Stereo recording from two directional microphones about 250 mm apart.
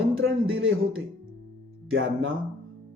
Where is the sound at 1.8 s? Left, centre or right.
Right.